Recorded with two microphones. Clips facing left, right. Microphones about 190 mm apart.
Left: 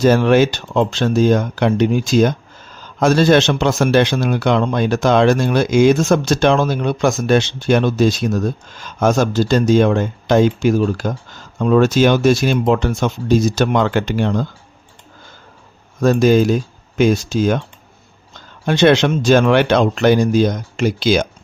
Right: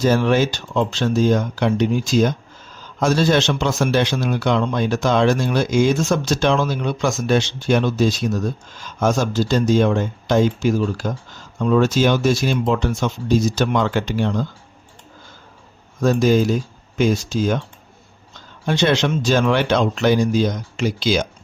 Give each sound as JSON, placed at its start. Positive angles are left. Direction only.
{"t": 0.0, "sound": "a man's voice", "side_deg": 65}
{"t": 16.0, "sound": "a man's voice", "side_deg": 65}
{"t": 18.6, "sound": "a man's voice", "side_deg": 65}